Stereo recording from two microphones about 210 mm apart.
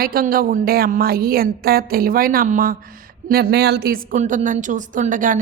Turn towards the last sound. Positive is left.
turn(degrees=-40)  # may be behind; listen again after turning